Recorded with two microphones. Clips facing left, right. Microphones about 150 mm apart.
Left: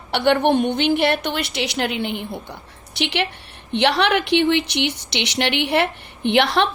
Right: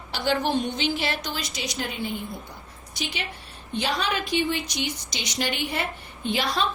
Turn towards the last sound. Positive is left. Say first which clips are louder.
# left 8 dB
turn(degrees=70)  # may be behind; listen again after turning